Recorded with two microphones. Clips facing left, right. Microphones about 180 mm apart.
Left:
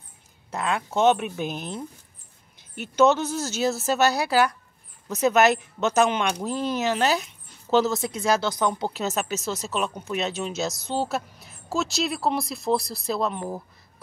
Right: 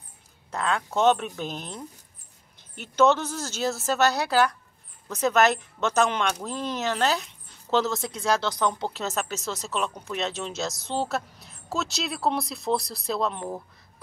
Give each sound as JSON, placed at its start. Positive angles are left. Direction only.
{"t": 0.5, "sound": "speech", "side_deg": 10}
{"t": 3.2, "sound": "a woman's voice", "side_deg": 20}